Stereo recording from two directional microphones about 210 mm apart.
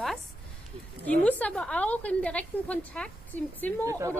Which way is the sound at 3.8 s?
15° right (ahead or behind).